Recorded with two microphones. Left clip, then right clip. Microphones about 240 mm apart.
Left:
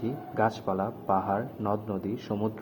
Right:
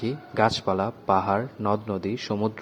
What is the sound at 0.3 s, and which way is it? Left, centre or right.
A man's voice, right.